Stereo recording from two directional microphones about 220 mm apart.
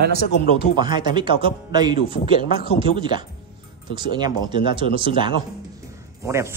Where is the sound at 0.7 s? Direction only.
20° right (ahead or behind).